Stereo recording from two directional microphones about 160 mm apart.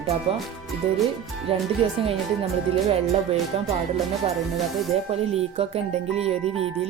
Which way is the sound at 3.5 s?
40° right (ahead or behind).